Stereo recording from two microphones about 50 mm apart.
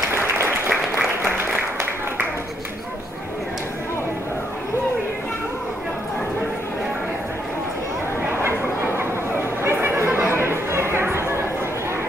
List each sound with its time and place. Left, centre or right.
0.1 s applause: right
8.9 s chatter: right